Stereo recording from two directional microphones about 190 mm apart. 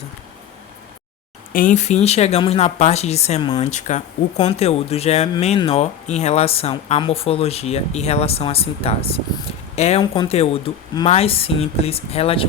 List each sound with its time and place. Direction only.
1.5 s speech: 40° left (ahead or behind)